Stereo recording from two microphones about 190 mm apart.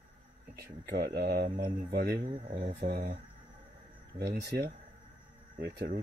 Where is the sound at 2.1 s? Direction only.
25° right (ahead or behind).